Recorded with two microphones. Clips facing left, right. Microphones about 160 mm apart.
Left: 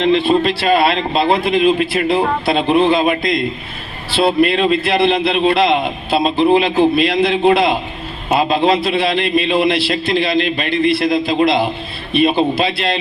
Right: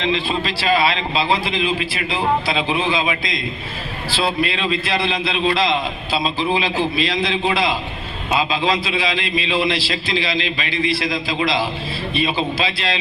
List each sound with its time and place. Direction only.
0.0 s a man's voice: 60° left (ahead or behind)